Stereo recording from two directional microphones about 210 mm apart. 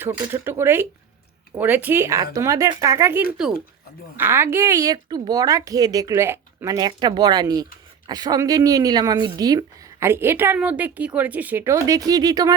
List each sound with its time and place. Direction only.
0.0 s a woman's voice: 10° right (ahead or behind)